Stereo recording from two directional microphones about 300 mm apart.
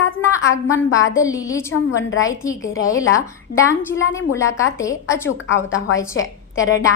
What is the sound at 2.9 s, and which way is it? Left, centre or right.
Speech, left.